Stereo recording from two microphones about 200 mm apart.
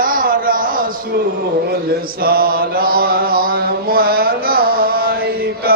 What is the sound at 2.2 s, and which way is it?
Mantra, 45° right (ahead or behind).